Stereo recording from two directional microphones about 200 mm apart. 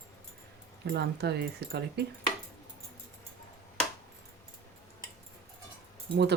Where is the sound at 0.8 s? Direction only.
55° right (ahead or behind).